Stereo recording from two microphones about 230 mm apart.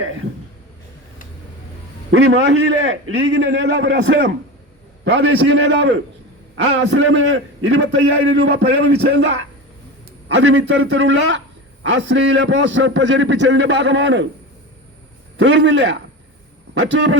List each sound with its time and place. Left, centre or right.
2.0 s a man's voice: right
6.7 s a man's voice: right
15.4 s a man's voice: right